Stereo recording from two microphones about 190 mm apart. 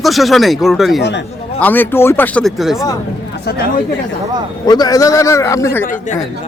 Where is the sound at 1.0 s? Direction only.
65° left (ahead or behind).